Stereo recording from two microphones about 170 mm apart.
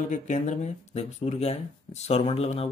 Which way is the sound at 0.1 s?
45° left (ahead or behind).